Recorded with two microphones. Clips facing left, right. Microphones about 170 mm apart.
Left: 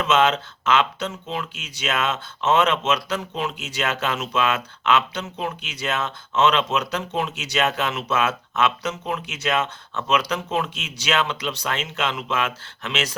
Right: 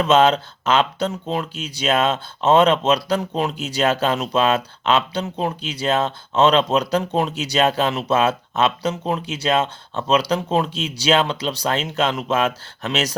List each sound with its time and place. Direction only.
0.0 s speech: 35° right (ahead or behind)